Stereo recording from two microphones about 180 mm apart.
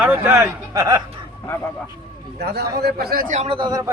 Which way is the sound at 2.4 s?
60° right (ahead or behind).